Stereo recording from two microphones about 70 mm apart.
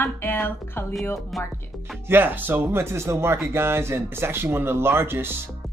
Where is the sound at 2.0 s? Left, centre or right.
Right.